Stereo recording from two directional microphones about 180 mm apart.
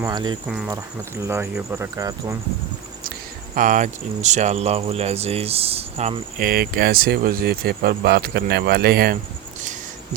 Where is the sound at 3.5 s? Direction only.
45° right (ahead or behind).